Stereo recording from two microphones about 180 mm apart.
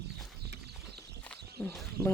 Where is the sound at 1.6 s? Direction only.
5° left (ahead or behind).